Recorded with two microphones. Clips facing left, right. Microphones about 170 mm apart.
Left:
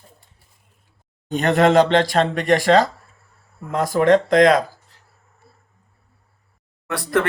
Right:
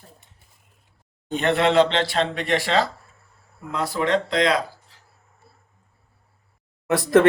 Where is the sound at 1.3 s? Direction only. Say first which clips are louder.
Left 4 dB; 40° left (ahead or behind).